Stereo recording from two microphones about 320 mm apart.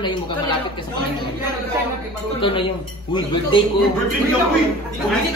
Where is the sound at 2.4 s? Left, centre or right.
Centre.